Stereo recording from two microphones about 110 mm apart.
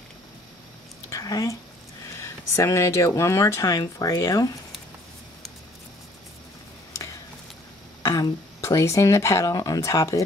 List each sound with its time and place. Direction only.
1.1 s speech: 30° left (ahead or behind)
8.0 s speech: 30° left (ahead or behind)